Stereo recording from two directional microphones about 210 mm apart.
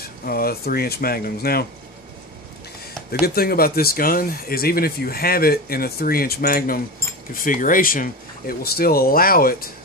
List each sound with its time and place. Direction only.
0.0 s speech: 45° left (ahead or behind)
3.1 s speech: 50° left (ahead or behind)